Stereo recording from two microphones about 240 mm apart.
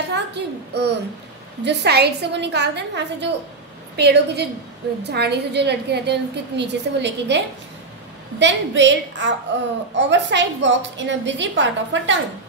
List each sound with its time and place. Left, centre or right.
0.1 s a woman's voice: right